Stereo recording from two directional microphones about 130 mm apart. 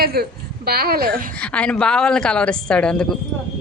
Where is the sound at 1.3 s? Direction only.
10° left (ahead or behind).